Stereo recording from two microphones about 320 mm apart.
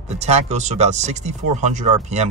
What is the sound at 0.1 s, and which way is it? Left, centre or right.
Speech, centre.